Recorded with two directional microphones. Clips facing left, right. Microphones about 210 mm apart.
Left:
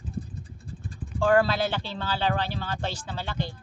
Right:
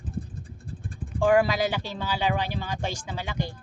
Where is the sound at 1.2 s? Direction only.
15° right (ahead or behind).